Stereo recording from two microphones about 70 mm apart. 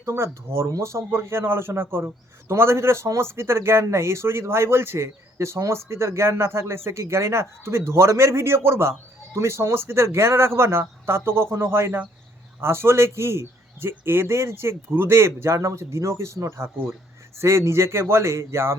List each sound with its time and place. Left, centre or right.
0.0 s speech: right